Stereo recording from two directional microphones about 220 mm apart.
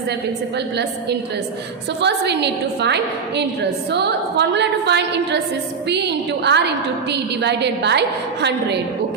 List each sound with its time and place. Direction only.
2.0 s a woman's voice: 50° right (ahead or behind)